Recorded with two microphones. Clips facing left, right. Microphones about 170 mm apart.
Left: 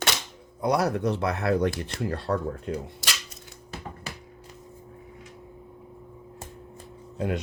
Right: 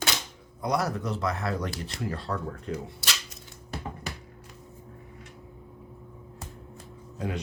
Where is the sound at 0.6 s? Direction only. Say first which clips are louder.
Left 4 dB; 65° left (ahead or behind).